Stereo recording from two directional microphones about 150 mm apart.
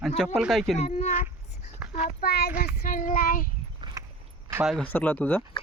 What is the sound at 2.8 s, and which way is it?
Child singing, 65° left (ahead or behind).